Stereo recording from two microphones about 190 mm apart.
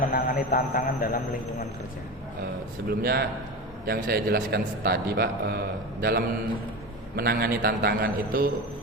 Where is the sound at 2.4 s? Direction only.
55° right (ahead or behind).